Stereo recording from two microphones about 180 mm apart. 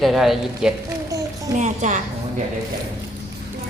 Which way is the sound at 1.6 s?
40° right (ahead or behind).